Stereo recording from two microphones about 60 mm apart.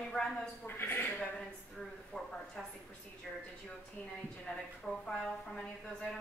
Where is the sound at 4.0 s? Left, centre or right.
Centre.